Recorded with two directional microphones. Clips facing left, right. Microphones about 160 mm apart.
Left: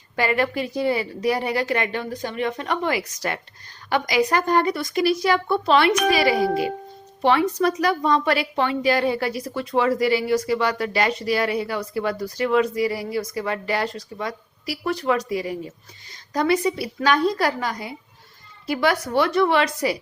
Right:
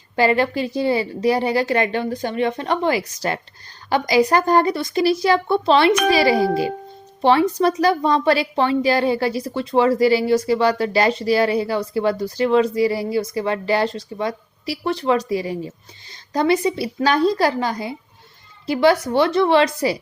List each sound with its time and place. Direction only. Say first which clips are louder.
0.2 s a woman's voice: right 4 dB; 30° right (ahead or behind)